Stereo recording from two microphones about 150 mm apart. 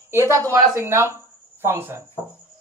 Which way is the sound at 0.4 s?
20° right (ahead or behind).